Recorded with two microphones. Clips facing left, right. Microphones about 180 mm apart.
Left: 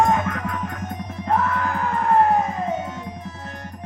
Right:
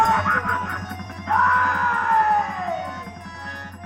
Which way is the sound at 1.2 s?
30° left (ahead or behind).